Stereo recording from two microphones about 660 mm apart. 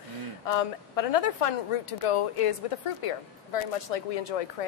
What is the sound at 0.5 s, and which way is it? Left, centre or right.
A woman's voice, left.